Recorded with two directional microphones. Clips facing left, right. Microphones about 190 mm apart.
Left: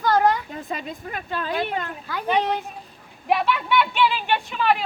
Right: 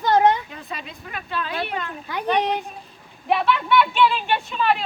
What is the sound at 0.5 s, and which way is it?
Speech, 50° left (ahead or behind).